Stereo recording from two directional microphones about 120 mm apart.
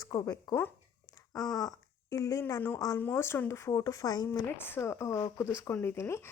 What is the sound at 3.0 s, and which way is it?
Speech, 20° left (ahead or behind).